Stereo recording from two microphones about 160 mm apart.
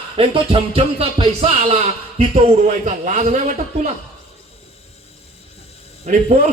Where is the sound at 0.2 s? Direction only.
35° right (ahead or behind).